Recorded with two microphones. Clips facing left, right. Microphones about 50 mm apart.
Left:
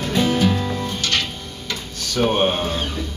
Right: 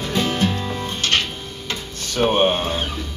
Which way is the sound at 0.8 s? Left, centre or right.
Right.